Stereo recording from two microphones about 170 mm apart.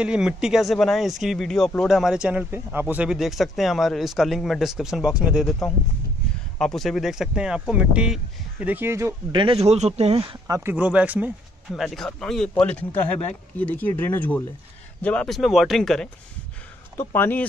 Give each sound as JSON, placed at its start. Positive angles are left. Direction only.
{"t": 0.0, "sound": "speech", "side_deg": -5}
{"t": 6.6, "sound": "speech", "side_deg": 0}
{"t": 9.3, "sound": "speech", "side_deg": -30}
{"t": 10.4, "sound": "speech", "side_deg": -15}
{"t": 16.9, "sound": "speech", "side_deg": 15}